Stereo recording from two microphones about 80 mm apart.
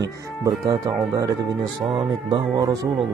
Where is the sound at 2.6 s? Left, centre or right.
Right.